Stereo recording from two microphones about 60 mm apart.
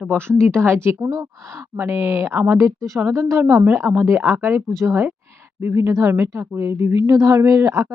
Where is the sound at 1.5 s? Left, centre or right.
Right.